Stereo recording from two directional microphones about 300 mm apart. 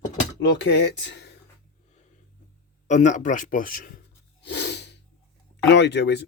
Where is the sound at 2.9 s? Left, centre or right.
Left.